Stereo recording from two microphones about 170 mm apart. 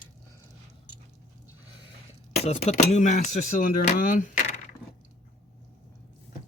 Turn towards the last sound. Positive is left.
turn(degrees=50)  # may be behind; listen again after turning